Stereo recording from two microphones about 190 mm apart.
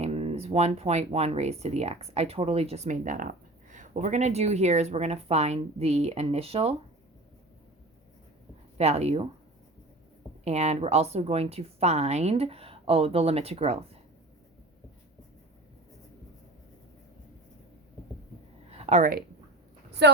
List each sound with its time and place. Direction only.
0.0 s speech: 35° right (ahead or behind)
8.8 s speech: 35° right (ahead or behind)
10.4 s speech: 35° right (ahead or behind)
18.7 s a sound: 35° right (ahead or behind)
20.0 s speech: 65° right (ahead or behind)